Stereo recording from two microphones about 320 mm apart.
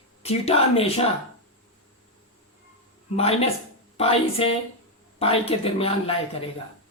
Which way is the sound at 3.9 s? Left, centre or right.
Centre.